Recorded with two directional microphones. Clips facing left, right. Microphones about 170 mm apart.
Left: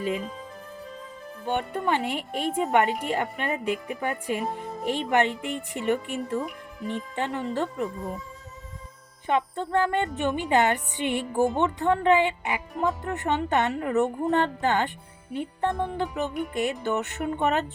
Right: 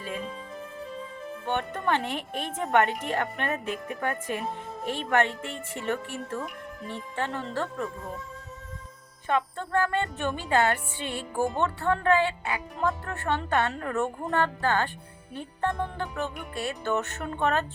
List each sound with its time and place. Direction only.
1.5 s music: 10° left (ahead or behind)
3.8 s music: centre (ahead or behind)
4.4 s speech: centre (ahead or behind)
5.1 s music: 15° left (ahead or behind)
9.2 s music: 20° left (ahead or behind)